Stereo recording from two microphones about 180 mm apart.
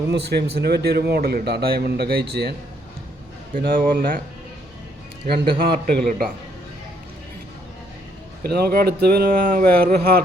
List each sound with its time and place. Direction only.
0.1 s a man's voice: 65° right (ahead or behind)
3.5 s a man's voice: 50° right (ahead or behind)
5.2 s a man's voice: 60° right (ahead or behind)
8.4 s a man's voice: 60° right (ahead or behind)